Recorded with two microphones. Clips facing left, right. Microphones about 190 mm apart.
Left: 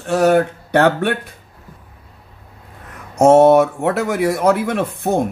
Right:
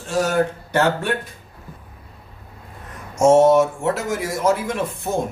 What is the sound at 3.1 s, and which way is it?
A man's voice, 60° left (ahead or behind).